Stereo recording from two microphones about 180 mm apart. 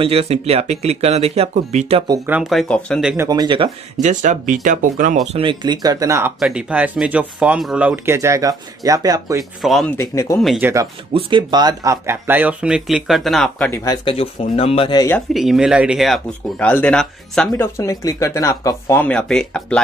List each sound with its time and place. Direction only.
0.0 s speech: 30° right (ahead or behind)
2.2 s speech: 10° right (ahead or behind)
3.3 s speech: 25° right (ahead or behind)
4.0 s speech: 45° right (ahead or behind); by 6.3 s 15° right (ahead or behind)
6.4 s speech: 5° right (ahead or behind)
9.6 s speech: centre (ahead or behind)
9.9 s speech: 15° left (ahead or behind)
10.6 s speech: 15° right (ahead or behind)
11.1 s speech: 30° right (ahead or behind); by 13.7 s centre (ahead or behind)
13.7 s speech: 15° left (ahead or behind)
14.0 s speech: 30° left (ahead or behind)
15.1 s speech: centre (ahead or behind)
17.5 s speech: 15° left (ahead or behind)